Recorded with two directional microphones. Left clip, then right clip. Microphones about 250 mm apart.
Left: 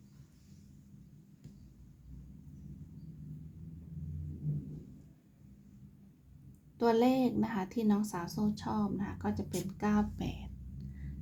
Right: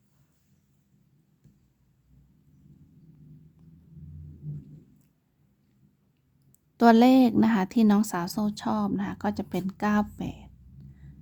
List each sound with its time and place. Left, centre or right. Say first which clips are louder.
6.7 s a woman's voice: right 10 dB; right